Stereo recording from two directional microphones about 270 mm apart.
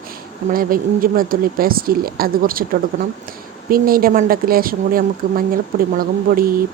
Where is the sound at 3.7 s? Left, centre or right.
Right.